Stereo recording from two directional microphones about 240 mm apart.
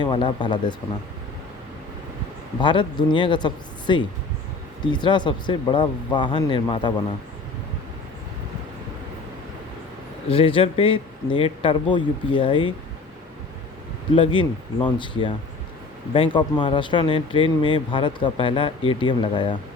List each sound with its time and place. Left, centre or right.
0.0 s speech: left
2.6 s speech: centre
10.2 s speech: left
14.2 s speech: left